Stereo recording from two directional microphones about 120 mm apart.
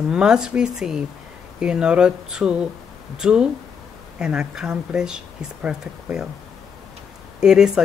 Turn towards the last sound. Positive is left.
turn(degrees=-5)  # may be behind; listen again after turning